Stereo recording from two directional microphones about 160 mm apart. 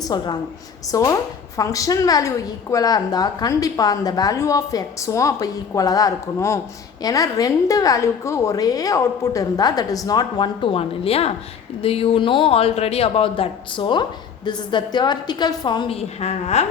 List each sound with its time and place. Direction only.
0.0 s a woman's voice: 25° left (ahead or behind); by 16.6 s 45° left (ahead or behind)